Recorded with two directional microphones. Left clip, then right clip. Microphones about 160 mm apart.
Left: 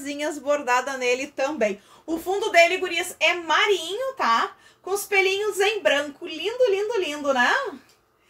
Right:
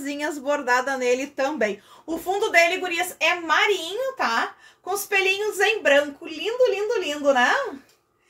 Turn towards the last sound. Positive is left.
turn(degrees=-5)  # may be behind; listen again after turning